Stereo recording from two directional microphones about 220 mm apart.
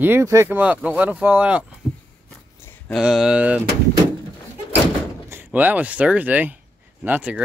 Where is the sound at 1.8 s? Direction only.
5° right (ahead or behind).